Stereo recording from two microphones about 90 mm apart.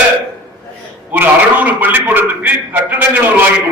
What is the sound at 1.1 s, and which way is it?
A man's voice, 20° right (ahead or behind).